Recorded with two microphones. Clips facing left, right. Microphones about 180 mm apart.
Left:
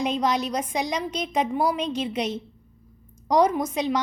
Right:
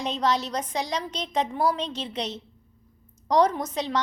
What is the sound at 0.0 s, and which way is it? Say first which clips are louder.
A woman's voice: left 2 dB; 10° left (ahead or behind).